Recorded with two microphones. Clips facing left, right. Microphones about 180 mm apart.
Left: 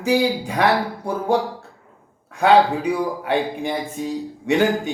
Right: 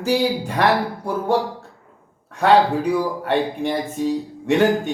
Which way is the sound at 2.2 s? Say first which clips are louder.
Even; 10° left (ahead or behind).